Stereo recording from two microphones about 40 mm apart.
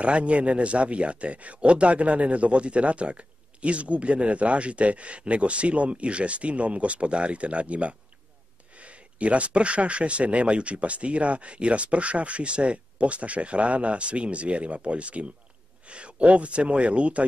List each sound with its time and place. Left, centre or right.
0.0 s a man's voice: right